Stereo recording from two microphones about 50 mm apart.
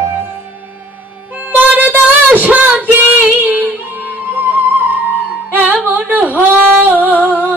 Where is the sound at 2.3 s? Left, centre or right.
Right.